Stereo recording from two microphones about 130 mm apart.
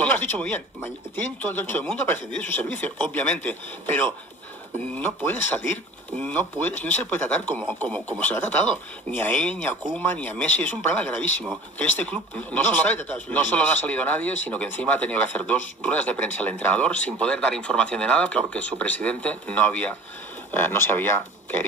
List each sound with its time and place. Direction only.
0.0 s speech: 15° left (ahead or behind)